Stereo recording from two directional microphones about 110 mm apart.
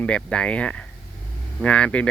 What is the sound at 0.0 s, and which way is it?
Speech, 10° left (ahead or behind).